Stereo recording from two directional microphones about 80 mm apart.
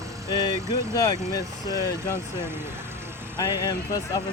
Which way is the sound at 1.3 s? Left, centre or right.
Left.